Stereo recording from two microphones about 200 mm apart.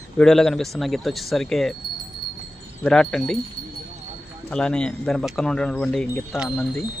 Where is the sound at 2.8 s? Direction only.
5° left (ahead or behind).